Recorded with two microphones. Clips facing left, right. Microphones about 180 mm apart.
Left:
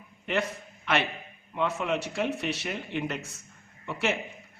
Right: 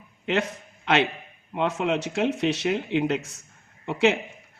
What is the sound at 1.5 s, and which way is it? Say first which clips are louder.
Speech: right 4 dB; 80° right.